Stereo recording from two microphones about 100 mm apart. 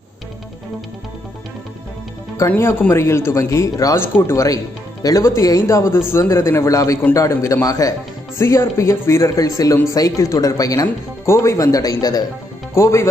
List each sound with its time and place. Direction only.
2.3 s a man's voice: 25° left (ahead or behind)
12.7 s a man's voice: 30° left (ahead or behind)